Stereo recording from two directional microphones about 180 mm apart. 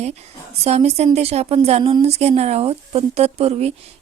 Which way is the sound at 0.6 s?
35° right (ahead or behind).